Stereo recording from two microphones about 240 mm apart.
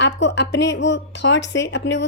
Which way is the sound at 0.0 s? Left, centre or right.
Left.